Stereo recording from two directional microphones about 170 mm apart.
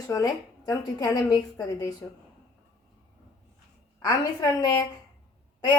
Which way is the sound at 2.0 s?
5° left (ahead or behind).